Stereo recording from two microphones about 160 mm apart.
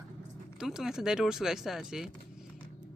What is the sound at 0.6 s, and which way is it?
Speech, 5° right (ahead or behind).